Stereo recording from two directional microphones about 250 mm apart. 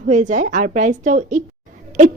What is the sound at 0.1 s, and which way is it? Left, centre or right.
A woman's voice, right.